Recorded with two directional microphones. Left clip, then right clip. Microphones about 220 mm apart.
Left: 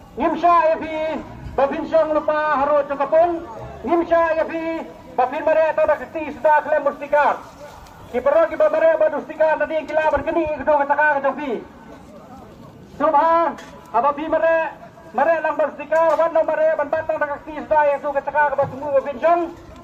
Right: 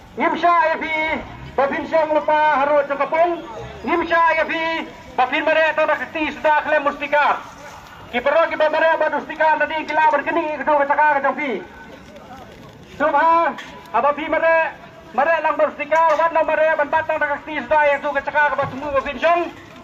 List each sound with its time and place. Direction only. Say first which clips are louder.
0.2 s a man's voice: even; 50° left (ahead or behind)
2.6 s a man's voice: right 1 dB; 45° left (ahead or behind)
3.8 s a man's voice: right 1 dB; 55° left (ahead or behind)
13.0 s speech: even; 20° left (ahead or behind)
13.9 s a man's voice: even; 40° left (ahead or behind)